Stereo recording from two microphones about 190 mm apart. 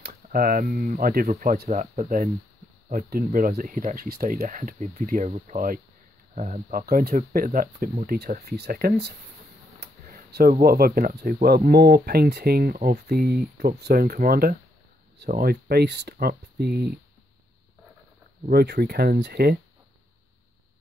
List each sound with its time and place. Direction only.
0.0 s speech: 50° right (ahead or behind)
18.5 s speech: 55° right (ahead or behind)